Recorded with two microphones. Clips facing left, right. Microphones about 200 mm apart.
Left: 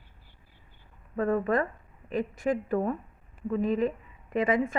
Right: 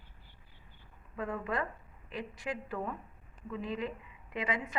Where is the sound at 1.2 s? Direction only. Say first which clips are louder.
Left 10 dB; 50° left (ahead or behind).